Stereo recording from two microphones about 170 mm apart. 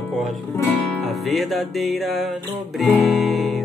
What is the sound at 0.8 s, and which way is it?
Music, centre (ahead or behind).